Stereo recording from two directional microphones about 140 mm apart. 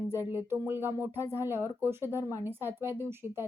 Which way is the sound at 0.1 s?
15° right (ahead or behind).